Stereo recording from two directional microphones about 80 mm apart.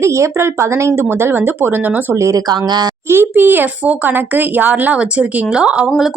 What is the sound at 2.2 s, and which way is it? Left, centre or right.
Speech, right.